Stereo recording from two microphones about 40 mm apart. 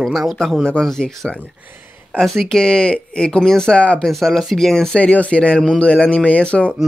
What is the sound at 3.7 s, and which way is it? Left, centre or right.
Speech, left.